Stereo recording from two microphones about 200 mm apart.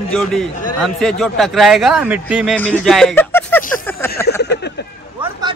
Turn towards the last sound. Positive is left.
turn(degrees=-25)  # may be behind; listen again after turning